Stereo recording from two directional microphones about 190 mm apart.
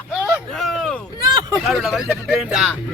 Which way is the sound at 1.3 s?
20° right (ahead or behind).